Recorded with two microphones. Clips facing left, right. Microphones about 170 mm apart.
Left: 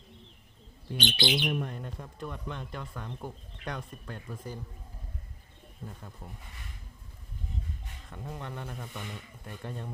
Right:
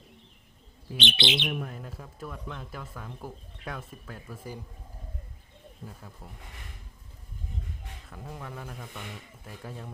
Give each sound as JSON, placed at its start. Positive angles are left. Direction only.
{"t": 0.9, "sound": "speech", "side_deg": -25}
{"t": 1.5, "sound": "speech", "side_deg": 0}
{"t": 5.8, "sound": "speech", "side_deg": -5}
{"t": 8.1, "sound": "speech", "side_deg": 0}